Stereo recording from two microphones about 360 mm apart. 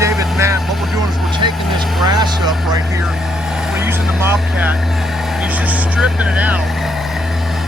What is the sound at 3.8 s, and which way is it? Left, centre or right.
Vehicle, centre.